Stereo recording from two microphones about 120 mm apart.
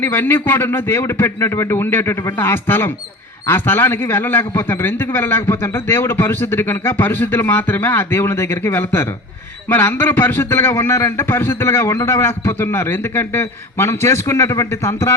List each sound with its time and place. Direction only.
0.0 s a man's voice: 15° left (ahead or behind)